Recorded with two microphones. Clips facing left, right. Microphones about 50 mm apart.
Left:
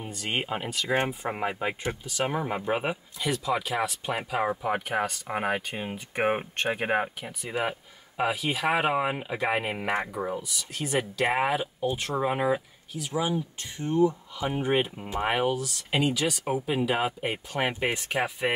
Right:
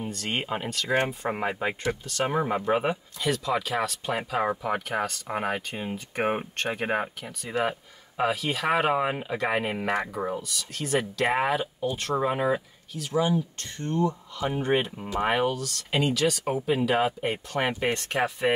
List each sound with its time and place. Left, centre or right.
0.0 s speech: centre
4.6 s speech: centre
10.6 s speech: centre